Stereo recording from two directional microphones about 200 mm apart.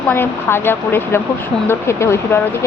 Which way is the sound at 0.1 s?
10° left (ahead or behind).